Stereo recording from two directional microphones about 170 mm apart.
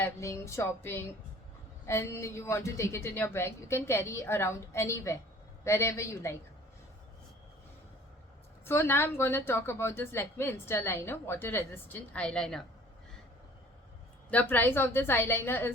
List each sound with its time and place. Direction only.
0.0 s a woman's voice: 15° left (ahead or behind)
8.6 s a woman's voice: 15° left (ahead or behind)
14.3 s a woman's voice: 10° left (ahead or behind)